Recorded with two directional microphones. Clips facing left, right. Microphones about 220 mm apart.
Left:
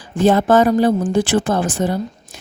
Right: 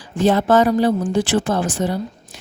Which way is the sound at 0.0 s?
50° left (ahead or behind).